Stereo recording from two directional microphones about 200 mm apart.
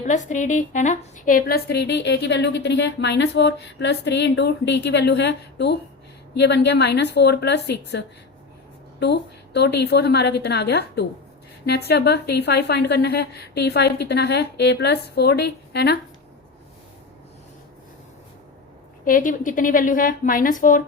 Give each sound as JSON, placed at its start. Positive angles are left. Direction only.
{"t": 0.0, "sound": "a woman's voice", "side_deg": 35}
{"t": 19.0, "sound": "a woman's voice", "side_deg": 45}